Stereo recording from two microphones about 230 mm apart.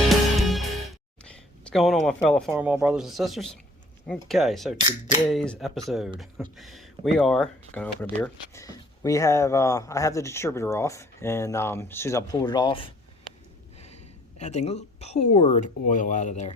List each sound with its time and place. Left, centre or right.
0.1 s music: centre
2.5 s a woman's voice: centre; by 16.6 s left